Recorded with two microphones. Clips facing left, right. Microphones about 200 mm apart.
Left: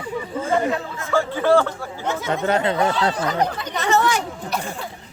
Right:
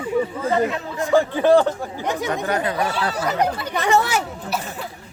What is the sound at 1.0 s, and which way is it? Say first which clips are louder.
Speech: right 7 dB; 15° right (ahead or behind).